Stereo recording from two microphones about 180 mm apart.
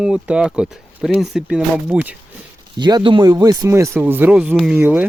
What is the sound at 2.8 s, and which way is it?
Speech, 25° right (ahead or behind).